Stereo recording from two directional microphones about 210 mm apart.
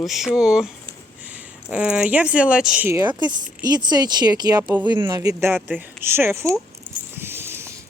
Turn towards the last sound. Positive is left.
turn(degrees=-10)  # may be behind; listen again after turning